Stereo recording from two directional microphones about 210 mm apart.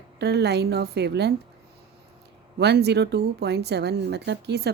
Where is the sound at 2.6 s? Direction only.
50° right (ahead or behind).